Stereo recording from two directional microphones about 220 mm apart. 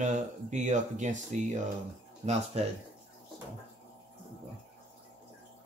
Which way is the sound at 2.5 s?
30° right (ahead or behind).